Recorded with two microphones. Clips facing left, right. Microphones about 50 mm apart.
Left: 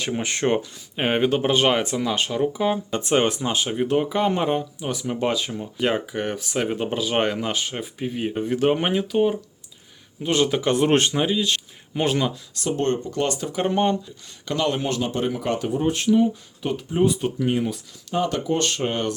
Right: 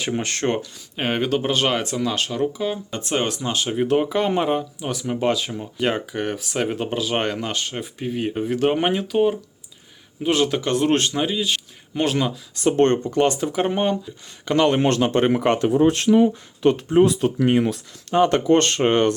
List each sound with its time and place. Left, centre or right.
0.2 s speech: centre
2.5 s speech: left
3.7 s speech: centre
10.6 s speech: centre
11.1 s speech: centre
12.5 s speech: right
13.1 s speech: right
13.5 s speech: centre
14.5 s speech: right
14.8 s speech: right
15.6 s speech: right